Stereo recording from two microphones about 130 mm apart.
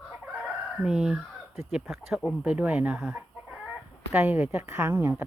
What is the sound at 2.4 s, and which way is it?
A woman's voice, 10° right (ahead or behind).